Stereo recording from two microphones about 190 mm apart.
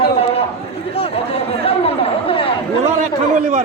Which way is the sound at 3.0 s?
40° right (ahead or behind).